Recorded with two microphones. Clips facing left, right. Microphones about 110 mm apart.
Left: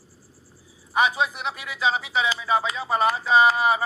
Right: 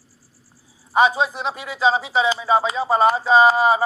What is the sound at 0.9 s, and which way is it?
A man's voice, 30° right (ahead or behind).